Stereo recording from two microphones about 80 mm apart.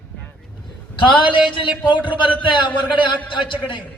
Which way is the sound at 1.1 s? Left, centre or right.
Left.